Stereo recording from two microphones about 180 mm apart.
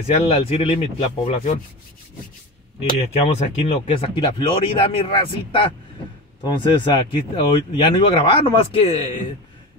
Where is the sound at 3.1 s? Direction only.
35° left (ahead or behind).